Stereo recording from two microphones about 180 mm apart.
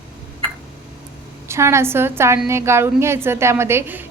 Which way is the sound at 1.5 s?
15° right (ahead or behind).